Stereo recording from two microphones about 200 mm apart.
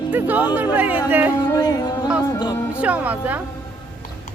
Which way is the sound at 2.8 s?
5° right (ahead or behind).